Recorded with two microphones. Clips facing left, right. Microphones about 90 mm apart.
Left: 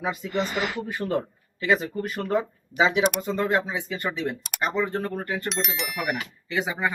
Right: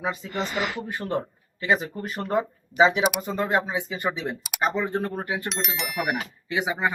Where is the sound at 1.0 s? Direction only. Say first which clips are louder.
Left 3 dB; 25° right (ahead or behind).